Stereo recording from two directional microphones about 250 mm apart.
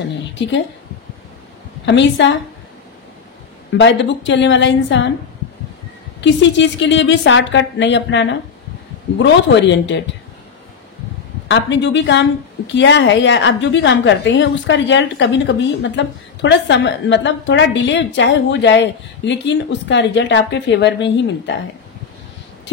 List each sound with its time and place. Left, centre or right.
1.9 s a woman's voice: left
3.7 s a woman's voice: left
6.2 s a woman's voice: left
11.4 s a woman's voice: left